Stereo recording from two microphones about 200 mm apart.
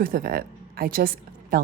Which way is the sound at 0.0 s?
50° right (ahead or behind).